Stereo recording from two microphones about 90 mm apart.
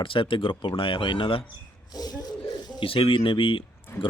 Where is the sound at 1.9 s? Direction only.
45° left (ahead or behind).